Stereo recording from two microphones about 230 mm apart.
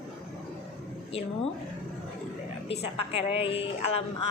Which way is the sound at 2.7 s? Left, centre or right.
Left.